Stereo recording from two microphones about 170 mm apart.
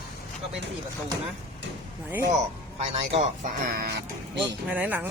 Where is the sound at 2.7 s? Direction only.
35° right (ahead or behind).